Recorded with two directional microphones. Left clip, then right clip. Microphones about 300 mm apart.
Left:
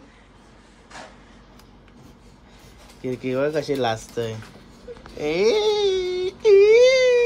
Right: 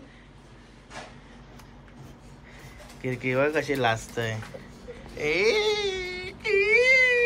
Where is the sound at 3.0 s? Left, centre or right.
Centre.